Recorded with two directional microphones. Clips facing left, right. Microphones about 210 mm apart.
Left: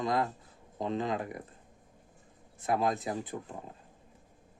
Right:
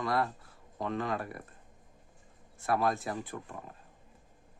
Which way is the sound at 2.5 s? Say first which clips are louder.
Even; 20° left (ahead or behind).